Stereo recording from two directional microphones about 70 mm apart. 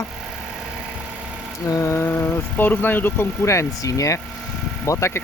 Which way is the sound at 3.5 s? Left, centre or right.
Left.